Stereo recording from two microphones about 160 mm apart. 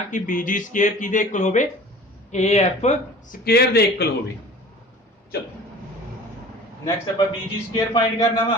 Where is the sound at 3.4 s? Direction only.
80° left.